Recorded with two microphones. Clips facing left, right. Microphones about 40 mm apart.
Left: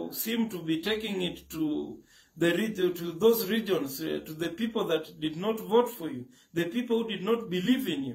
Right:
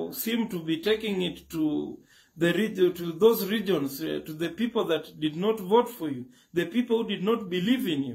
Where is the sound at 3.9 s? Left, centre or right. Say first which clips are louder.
Right 2 dB; right.